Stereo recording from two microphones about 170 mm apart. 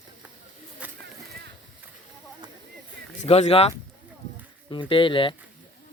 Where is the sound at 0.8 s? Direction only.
10° right (ahead or behind).